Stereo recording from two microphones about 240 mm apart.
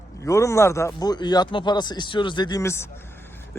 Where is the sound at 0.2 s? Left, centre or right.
Centre.